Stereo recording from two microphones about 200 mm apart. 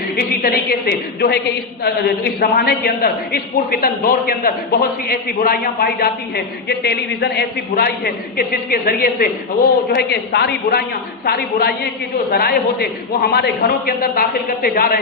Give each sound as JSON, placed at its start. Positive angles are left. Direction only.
{"t": 0.2, "sound": "a man's voice", "side_deg": 50}